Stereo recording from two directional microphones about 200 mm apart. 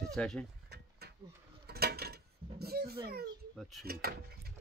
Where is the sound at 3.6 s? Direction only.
Centre (ahead or behind).